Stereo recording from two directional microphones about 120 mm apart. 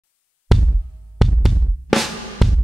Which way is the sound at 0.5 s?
Centre (ahead or behind).